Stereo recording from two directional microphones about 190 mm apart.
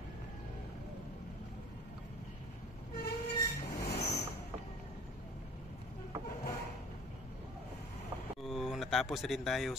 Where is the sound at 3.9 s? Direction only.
55° left (ahead or behind).